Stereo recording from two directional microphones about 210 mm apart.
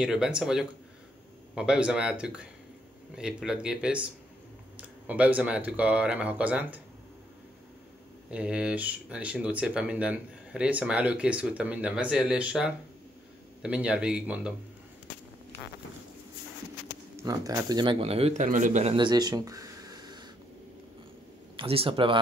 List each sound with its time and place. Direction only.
0.0 s speech: 5° right (ahead or behind)
8.3 s speech: 5° right (ahead or behind)
17.2 s a man's voice: 15° right (ahead or behind)
21.5 s speech: 25° right (ahead or behind)